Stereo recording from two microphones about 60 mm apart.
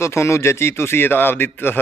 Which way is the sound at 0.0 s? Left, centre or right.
Left.